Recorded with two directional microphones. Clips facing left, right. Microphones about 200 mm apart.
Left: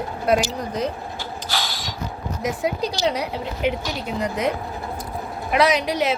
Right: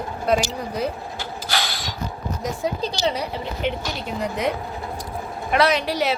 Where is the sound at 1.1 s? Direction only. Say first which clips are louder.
Right 1 dB; 75° right (ahead or behind).